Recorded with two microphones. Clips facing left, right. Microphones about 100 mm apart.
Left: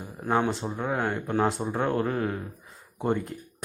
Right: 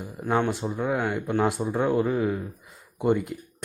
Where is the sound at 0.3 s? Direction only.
10° left (ahead or behind); by 3.3 s 5° right (ahead or behind).